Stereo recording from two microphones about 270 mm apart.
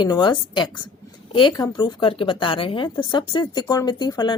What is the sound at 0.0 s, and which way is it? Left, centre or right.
A woman's voice, centre.